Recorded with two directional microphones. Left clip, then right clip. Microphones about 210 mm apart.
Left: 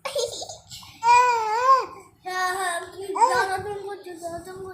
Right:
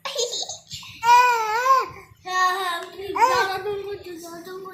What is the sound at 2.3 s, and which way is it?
Child singing, 30° left (ahead or behind).